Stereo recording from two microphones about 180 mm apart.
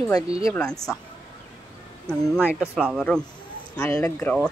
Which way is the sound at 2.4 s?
5° right (ahead or behind).